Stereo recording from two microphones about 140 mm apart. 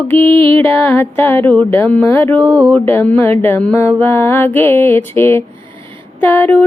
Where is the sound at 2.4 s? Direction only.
10° right (ahead or behind).